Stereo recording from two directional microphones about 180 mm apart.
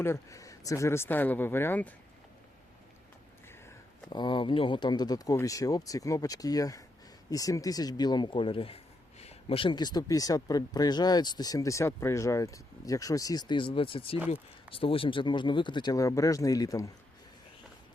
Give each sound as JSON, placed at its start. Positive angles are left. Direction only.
{"t": 0.0, "sound": "speech", "side_deg": 15}
{"t": 4.1, "sound": "speech", "side_deg": 25}